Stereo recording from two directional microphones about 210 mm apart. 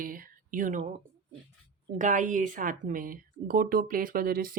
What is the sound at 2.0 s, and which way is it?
A woman's voice, 35° right (ahead or behind).